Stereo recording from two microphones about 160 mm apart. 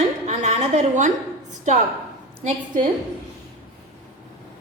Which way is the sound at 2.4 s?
55° right (ahead or behind).